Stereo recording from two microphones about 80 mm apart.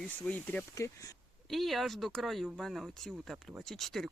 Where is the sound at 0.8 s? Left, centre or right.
Left.